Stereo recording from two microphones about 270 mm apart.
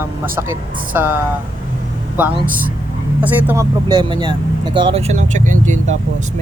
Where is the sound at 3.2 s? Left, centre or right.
Centre; by 6.3 s right.